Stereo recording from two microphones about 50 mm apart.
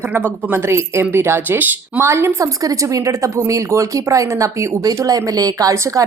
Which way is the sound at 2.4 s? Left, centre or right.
Right.